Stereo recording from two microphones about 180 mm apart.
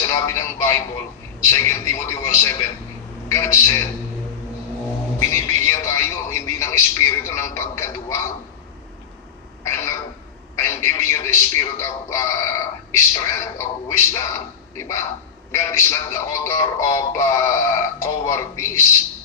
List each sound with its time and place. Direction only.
0.0 s speech: 15° left (ahead or behind)
1.5 s music: 15° left (ahead or behind)
5.3 s music: 15° left (ahead or behind)
9.7 s music: 15° left (ahead or behind)